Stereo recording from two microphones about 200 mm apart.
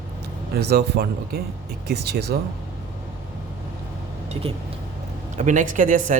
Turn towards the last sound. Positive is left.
turn(degrees=-40)  # may be behind; listen again after turning